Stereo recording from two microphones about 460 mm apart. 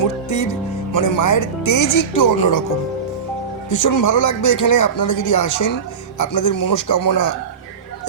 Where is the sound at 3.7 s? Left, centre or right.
Left.